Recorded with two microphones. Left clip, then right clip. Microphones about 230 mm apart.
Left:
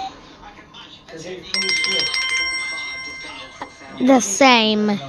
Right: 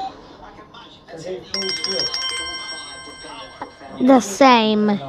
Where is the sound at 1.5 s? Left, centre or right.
Centre.